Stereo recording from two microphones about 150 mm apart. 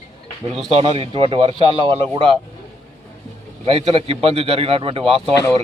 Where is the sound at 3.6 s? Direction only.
40° right (ahead or behind).